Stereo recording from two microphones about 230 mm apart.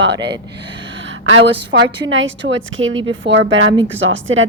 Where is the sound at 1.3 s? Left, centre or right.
Right.